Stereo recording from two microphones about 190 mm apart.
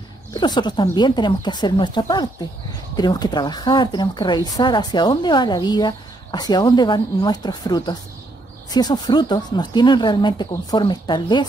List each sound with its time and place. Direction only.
0.3 s speech: 20° left (ahead or behind)